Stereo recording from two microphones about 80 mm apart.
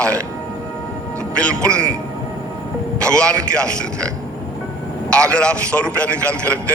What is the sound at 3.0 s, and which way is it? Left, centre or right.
A man's voice, centre.